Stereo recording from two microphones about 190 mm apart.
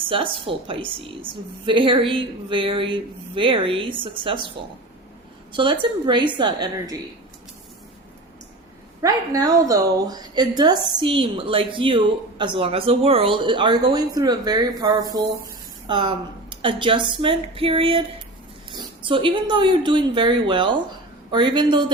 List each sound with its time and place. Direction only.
0.1 s a woman's voice: 25° right (ahead or behind)
5.5 s a woman's voice: 25° right (ahead or behind)
9.0 s a woman's voice: 15° right (ahead or behind)